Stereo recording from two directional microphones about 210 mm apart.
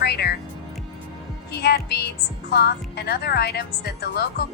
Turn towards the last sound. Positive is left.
turn(degrees=50)  # may be behind; listen again after turning